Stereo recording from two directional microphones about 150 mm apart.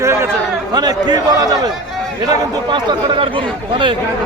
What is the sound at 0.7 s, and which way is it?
A man's voice, 25° right (ahead or behind).